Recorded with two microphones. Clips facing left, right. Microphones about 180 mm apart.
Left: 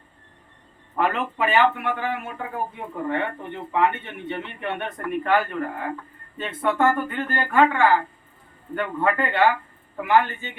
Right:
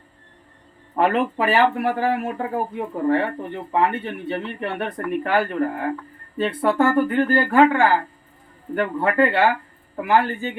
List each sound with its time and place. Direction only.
0.9 s speech: 35° right (ahead or behind)